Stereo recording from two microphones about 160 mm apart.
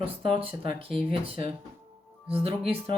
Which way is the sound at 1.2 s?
35° right (ahead or behind).